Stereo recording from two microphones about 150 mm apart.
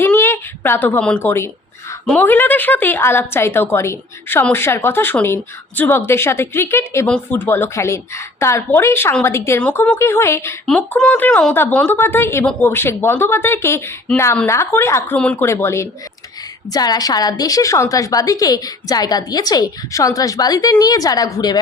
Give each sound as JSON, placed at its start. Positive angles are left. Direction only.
{"t": 0.0, "sound": "a sound", "side_deg": 15}
{"t": 2.0, "sound": "a woman's voice", "side_deg": 10}
{"t": 10.7, "sound": "a woman's voice", "side_deg": 5}